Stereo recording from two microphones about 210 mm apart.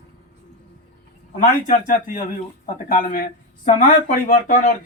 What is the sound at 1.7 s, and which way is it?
Speech, 40° left (ahead or behind).